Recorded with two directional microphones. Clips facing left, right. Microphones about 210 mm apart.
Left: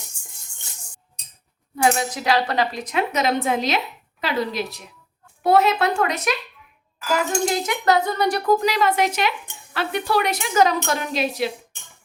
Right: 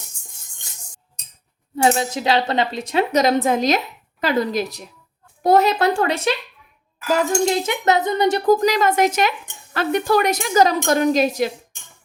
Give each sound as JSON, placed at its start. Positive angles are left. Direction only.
{"t": 1.7, "sound": "a woman's voice", "side_deg": -25}
{"t": 7.5, "sound": "speech", "side_deg": -25}
{"t": 8.4, "sound": "a woman's voice", "side_deg": -40}